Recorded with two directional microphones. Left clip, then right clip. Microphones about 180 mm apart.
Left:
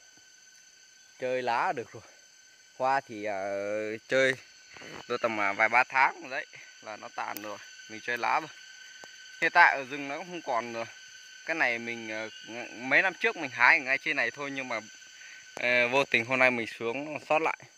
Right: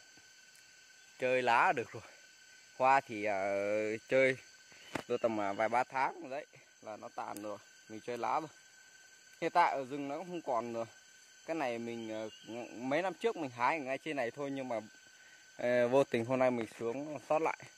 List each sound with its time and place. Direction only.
1.2 s speech: 5° right (ahead or behind)
5.0 s speech: 10° right (ahead or behind)
7.9 s speech: 5° right (ahead or behind)
11.4 s speech: 5° right (ahead or behind)
15.6 s speech: 40° right (ahead or behind)
16.3 s speech: 10° right (ahead or behind)